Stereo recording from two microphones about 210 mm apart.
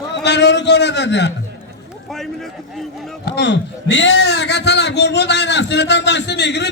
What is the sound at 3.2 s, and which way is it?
Speech, 55° left (ahead or behind).